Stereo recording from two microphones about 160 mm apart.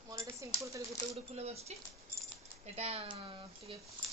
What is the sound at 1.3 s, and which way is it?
Speech, 40° right (ahead or behind).